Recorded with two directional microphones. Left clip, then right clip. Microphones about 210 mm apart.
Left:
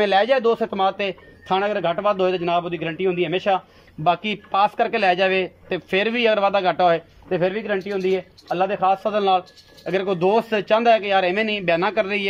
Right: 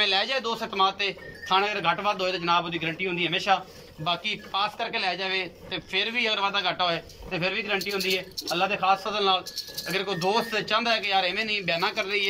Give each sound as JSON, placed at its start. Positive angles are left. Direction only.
{"t": 0.0, "sound": "speech", "side_deg": 40}